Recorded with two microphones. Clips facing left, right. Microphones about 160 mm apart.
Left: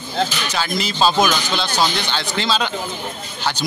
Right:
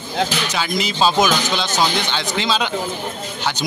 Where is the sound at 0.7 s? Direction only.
15° right (ahead or behind).